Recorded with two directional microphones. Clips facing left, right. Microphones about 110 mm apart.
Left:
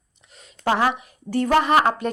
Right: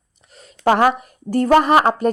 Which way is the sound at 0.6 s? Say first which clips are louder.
Right 6 dB; 55° right (ahead or behind).